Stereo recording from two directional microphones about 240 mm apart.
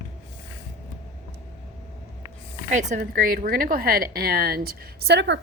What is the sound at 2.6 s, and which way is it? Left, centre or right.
A woman's voice, right.